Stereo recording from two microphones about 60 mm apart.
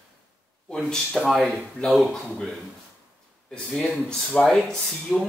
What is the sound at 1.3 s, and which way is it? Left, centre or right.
Speech, centre.